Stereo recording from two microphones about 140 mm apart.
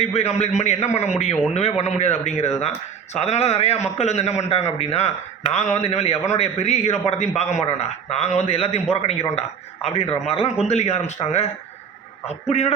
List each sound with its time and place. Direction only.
0.0 s a man's voice: 50° left (ahead or behind)